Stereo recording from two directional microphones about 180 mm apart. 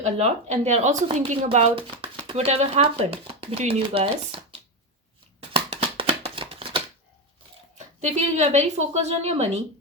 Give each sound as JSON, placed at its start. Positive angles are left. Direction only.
{"t": 0.0, "sound": "speech", "side_deg": -40}
{"t": 5.5, "sound": "shuffling cards", "side_deg": -30}
{"t": 8.0, "sound": "speech", "side_deg": -40}